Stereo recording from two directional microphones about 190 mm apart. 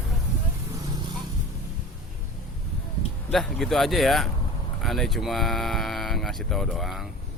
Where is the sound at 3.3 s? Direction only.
Centre (ahead or behind).